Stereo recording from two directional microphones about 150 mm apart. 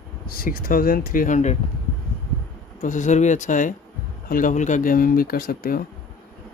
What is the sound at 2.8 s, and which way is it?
Speech, 55° left (ahead or behind).